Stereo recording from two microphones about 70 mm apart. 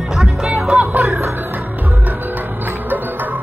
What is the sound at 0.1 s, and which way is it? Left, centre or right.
Music, centre.